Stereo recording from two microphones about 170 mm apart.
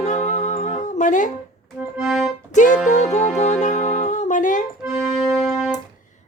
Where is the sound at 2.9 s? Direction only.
45° left (ahead or behind).